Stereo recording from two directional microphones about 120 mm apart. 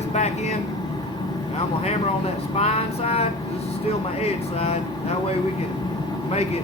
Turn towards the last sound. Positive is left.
turn(degrees=60)  # may be behind; listen again after turning